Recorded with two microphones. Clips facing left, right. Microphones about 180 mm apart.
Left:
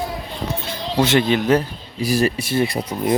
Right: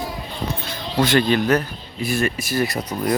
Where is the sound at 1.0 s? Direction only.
20° left (ahead or behind).